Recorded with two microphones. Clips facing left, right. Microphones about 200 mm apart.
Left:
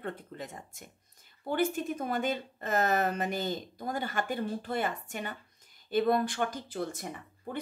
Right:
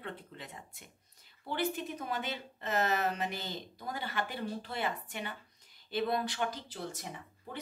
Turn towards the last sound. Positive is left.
turn(degrees=55)  # may be behind; listen again after turning